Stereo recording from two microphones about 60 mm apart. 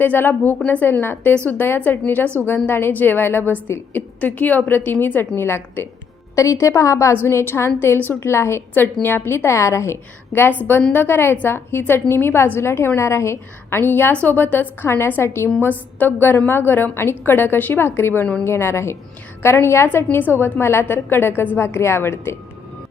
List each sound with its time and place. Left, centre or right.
0.0 s a woman's voice: left
6.3 s a woman's voice: left
8.7 s a woman's voice: left
14.8 s a woman's voice: left
16.0 s a woman's voice: left
21.6 s a woman's voice: left